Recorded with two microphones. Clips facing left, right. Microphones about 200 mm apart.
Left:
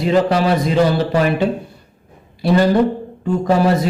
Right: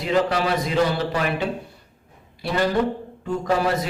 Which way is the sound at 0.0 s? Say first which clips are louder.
Left 6 dB; 30° left (ahead or behind).